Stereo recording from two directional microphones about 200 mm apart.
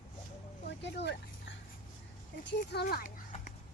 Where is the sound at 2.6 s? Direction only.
45° left (ahead or behind).